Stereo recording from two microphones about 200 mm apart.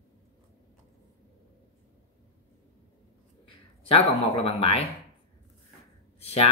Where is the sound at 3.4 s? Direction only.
30° left (ahead or behind).